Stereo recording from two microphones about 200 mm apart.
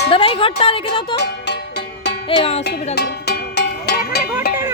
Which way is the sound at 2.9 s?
55° left (ahead or behind).